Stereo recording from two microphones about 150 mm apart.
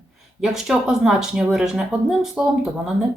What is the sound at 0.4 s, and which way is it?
Speech, 5° right (ahead or behind).